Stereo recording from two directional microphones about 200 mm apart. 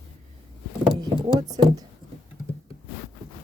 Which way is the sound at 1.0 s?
20° right (ahead or behind).